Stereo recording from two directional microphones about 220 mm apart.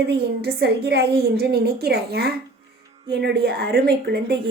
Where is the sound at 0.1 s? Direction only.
45° right (ahead or behind).